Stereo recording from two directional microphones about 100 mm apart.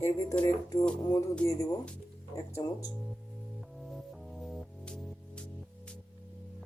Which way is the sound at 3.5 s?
Centre (ahead or behind).